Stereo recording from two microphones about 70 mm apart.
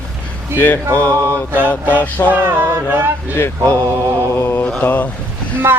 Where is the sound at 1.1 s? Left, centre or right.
Right.